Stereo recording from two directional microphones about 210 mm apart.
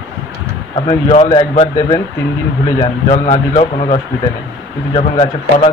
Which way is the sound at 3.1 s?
30° left (ahead or behind).